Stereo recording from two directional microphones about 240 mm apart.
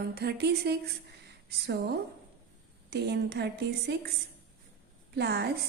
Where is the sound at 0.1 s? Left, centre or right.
Right.